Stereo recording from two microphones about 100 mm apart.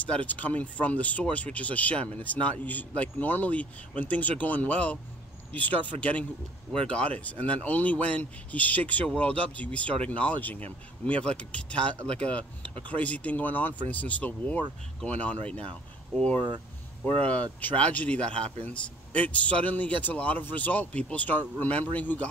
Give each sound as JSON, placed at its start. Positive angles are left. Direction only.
{"t": 0.3, "sound": "speech", "side_deg": 15}
{"t": 17.3, "sound": "speech", "side_deg": 15}